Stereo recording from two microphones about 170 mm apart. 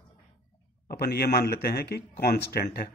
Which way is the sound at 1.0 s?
65° left (ahead or behind).